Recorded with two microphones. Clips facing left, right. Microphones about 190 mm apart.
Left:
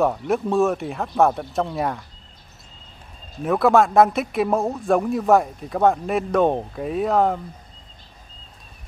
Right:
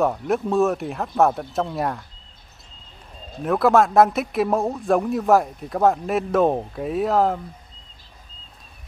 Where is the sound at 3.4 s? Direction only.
Centre (ahead or behind).